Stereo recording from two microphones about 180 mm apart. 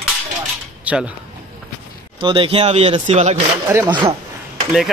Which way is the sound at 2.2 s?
30° right (ahead or behind).